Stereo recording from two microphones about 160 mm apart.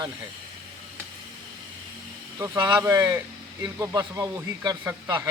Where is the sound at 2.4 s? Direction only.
25° right (ahead or behind).